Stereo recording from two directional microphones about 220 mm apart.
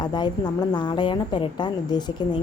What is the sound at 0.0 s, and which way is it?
A woman's voice, 20° left (ahead or behind).